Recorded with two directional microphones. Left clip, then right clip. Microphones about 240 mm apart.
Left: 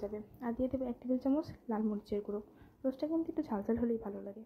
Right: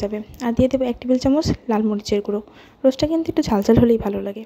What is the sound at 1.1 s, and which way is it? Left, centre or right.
Speech, right.